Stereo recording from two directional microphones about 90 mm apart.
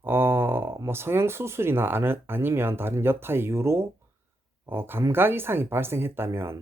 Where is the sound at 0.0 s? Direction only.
25° right (ahead or behind).